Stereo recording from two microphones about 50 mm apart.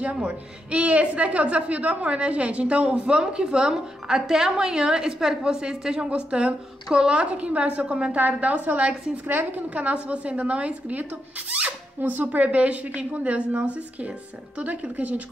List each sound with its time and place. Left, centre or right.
0.0 s a woman's voice: right
8.2 s a woman's voice: right
12.0 s a woman's voice: right